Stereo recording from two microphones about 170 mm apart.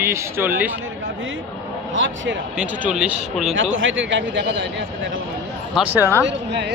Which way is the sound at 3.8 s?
90° right.